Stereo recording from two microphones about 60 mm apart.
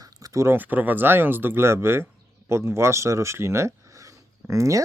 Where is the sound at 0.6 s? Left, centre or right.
Right.